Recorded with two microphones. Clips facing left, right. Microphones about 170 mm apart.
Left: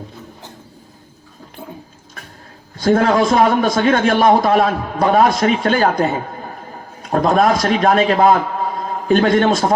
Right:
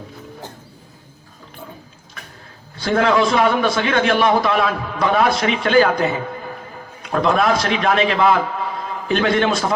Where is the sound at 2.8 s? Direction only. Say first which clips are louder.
Left 3 dB; 40° left (ahead or behind).